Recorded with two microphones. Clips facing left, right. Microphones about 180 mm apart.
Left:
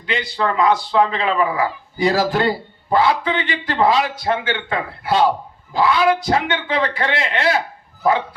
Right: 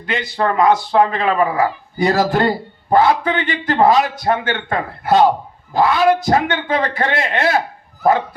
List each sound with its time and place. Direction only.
0.0 s speech: 50° right (ahead or behind)